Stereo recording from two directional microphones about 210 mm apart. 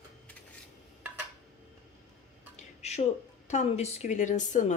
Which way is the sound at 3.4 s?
30° left (ahead or behind).